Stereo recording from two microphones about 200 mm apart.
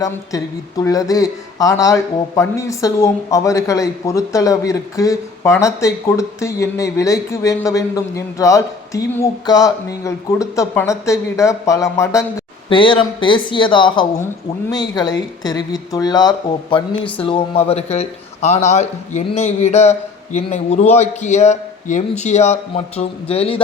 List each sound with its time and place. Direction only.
0.0 s speech: 15° left (ahead or behind)